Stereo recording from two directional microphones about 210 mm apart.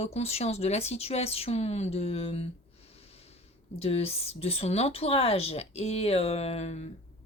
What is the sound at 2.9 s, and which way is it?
Snort, 30° left (ahead or behind).